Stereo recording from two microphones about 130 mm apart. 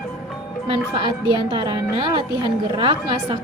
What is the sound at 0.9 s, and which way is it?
A woman's voice, 35° right (ahead or behind).